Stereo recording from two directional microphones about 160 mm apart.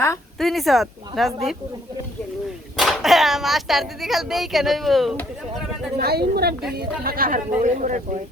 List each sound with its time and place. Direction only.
0.3 s speech: centre (ahead or behind)
2.7 s speech: centre (ahead or behind)
6.0 s a woman's voice: 80° right
6.7 s speech: 70° right (ahead or behind); by 8.2 s 50° right (ahead or behind)